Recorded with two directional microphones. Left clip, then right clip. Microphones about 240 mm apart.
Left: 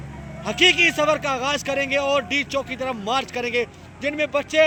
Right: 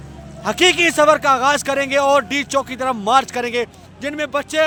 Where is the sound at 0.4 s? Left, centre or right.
Right.